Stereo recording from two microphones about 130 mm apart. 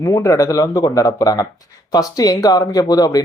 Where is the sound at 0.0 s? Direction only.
25° left (ahead or behind).